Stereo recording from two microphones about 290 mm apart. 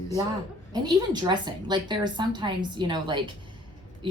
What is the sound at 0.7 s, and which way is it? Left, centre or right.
A woman's voice, centre.